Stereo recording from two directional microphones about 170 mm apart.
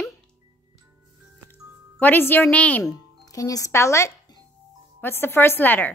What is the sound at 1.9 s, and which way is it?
Speech, 10° left (ahead or behind).